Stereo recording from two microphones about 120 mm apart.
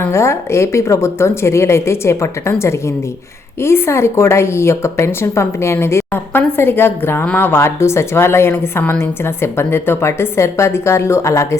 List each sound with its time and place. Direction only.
0.1 s a woman's voice: 25° left (ahead or behind)